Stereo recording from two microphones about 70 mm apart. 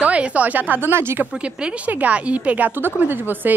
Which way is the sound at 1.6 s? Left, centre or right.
Right.